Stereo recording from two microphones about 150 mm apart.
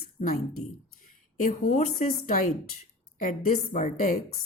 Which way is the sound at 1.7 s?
50° left (ahead or behind).